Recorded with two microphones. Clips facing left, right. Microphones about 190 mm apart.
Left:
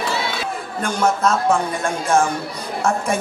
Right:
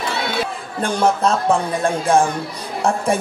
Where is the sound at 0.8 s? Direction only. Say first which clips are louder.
Right 2 dB; 30° right (ahead or behind).